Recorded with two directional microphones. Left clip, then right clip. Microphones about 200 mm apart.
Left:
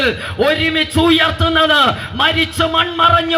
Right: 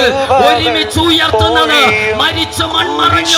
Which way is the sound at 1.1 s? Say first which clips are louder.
Right 5 dB; 40° right (ahead or behind).